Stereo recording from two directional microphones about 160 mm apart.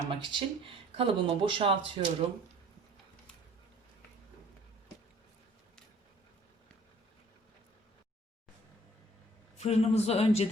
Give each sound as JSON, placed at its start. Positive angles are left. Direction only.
{"t": 0.1, "sound": "speech", "side_deg": -30}
{"t": 9.6, "sound": "speech", "side_deg": 40}